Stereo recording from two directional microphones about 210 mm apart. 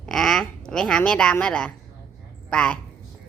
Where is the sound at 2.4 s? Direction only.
5° left (ahead or behind).